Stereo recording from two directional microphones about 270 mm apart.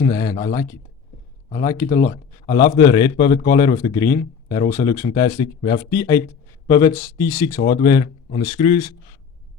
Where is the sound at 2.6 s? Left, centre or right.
Centre.